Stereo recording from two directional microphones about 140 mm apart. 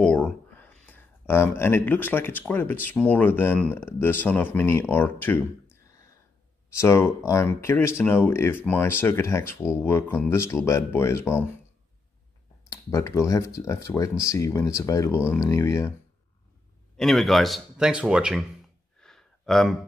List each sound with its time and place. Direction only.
0.0 s speech: 10° left (ahead or behind)
6.8 s speech: 20° left (ahead or behind)
12.6 s speech: 20° left (ahead or behind)
16.9 s speech: centre (ahead or behind)
18.9 s a sound: 5° left (ahead or behind)